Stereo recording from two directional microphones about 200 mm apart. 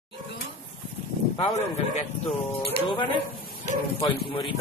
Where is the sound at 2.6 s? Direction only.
25° left (ahead or behind).